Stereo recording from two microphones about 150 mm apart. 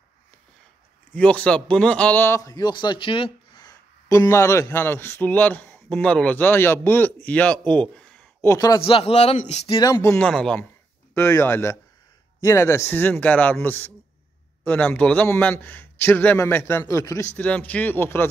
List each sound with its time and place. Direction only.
1.1 s a man's voice: 10° left (ahead or behind)
8.4 s a man's voice: 20° left (ahead or behind)
8.8 s a man's voice: 40° left (ahead or behind)
9.8 s speech: 20° left (ahead or behind)
10.1 s speech: 5° left (ahead or behind)
11.1 s a man's voice: 15° left (ahead or behind)